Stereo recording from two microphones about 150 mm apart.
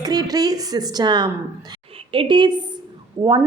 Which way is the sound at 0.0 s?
25° right (ahead or behind).